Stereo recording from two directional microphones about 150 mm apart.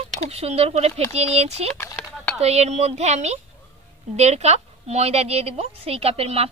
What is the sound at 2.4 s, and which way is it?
A woman's voice, 45° right (ahead or behind).